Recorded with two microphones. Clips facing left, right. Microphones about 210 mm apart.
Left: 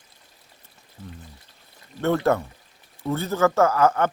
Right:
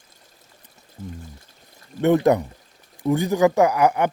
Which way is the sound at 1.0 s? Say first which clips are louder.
Right 6 dB; 45° right (ahead or behind).